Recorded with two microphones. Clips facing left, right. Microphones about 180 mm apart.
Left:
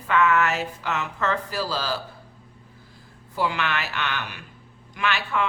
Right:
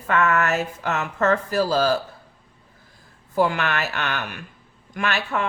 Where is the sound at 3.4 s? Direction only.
50° right (ahead or behind).